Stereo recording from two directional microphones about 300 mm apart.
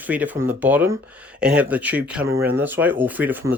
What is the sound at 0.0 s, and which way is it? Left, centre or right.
Speech, centre.